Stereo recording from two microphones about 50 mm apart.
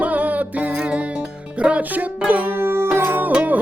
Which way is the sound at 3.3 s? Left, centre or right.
Right.